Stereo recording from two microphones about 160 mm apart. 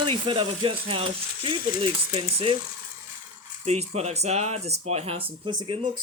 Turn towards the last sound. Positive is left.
turn(degrees=-35)  # may be behind; listen again after turning